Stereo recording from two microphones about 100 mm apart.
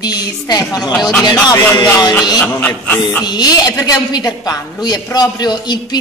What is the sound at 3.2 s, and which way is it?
A woman's voice, 45° left (ahead or behind).